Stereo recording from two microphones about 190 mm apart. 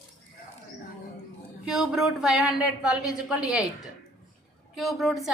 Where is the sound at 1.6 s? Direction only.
5° right (ahead or behind).